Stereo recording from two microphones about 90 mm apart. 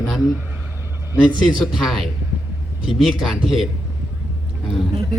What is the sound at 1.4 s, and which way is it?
A man's voice, centre (ahead or behind).